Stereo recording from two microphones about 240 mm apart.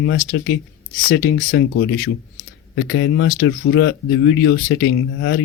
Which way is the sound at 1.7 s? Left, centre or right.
Left.